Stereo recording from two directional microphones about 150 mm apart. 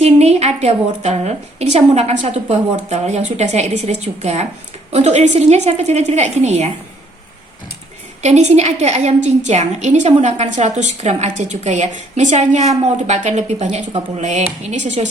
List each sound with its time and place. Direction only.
0.0 s a woman's voice: 45° right (ahead or behind)
8.2 s a woman's voice: 50° right (ahead or behind)